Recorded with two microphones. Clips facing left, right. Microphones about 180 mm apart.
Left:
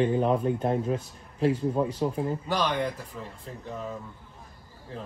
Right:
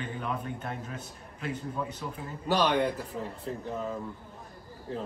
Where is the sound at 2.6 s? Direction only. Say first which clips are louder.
Right 3 dB; 10° right (ahead or behind).